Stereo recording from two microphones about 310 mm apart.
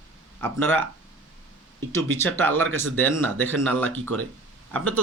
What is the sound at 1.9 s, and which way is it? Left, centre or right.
A man's voice, centre.